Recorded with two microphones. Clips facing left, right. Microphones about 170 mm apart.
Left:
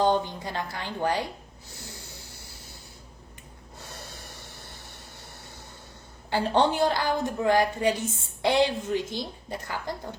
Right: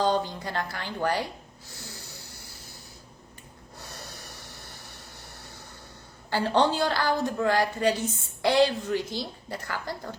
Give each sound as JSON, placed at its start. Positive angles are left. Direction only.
{"t": 0.0, "sound": "a woman's voice", "side_deg": 20}
{"t": 6.3, "sound": "a woman's voice", "side_deg": 20}